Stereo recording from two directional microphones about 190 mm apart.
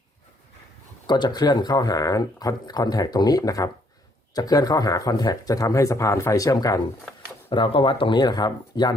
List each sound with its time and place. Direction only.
1.0 s speech: 25° left (ahead or behind)